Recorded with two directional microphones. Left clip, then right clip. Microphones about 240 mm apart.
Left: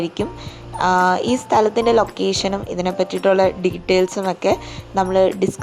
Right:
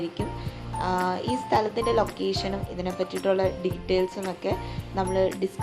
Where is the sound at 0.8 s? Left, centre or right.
Left.